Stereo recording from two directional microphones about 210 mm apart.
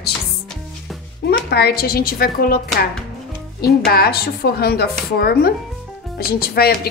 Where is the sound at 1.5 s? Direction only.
50° left (ahead or behind).